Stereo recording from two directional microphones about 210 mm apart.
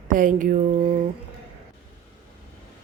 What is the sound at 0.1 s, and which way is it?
Mantra, 40° right (ahead or behind).